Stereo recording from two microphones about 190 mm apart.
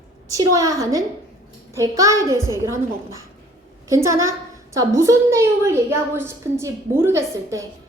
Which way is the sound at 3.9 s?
15° right (ahead or behind).